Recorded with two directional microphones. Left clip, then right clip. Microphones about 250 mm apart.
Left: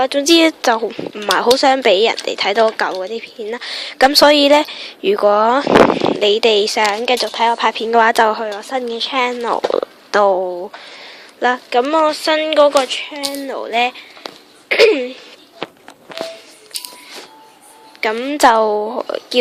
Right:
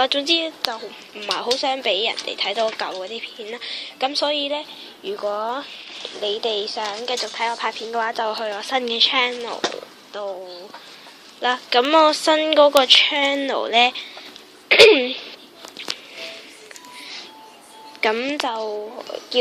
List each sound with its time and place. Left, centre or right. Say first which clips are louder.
0.0 s a woman's voice: left 3 dB; left
0.3 s a woman's voice: left 10 dB; left
1.1 s a woman's voice: left 9 dB; left
3.9 s a woman's voice: left 13 dB; left
8.4 s speech: left 4 dB; left
8.7 s speech: right 2 dB; centre; by 9.6 s left
10.1 s speech: left 17 dB; left
11.3 s a woman's voice: left 5 dB; left
11.7 s speech: right 2 dB; centre
18.0 s a woman's voice: left 2 dB; centre
18.4 s a woman's voice: left 14 dB; left